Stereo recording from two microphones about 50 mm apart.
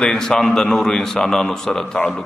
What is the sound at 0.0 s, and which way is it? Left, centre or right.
A man's voice, centre.